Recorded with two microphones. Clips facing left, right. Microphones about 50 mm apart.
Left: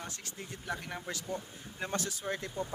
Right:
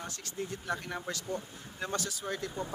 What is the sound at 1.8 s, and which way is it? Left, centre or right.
Speech, centre.